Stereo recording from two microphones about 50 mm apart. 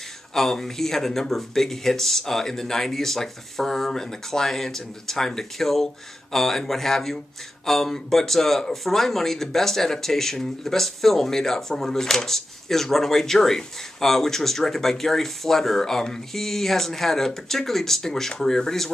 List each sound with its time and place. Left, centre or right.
0.3 s speech: centre